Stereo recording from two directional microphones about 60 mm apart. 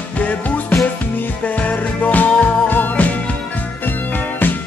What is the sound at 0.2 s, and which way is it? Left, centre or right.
Music, left.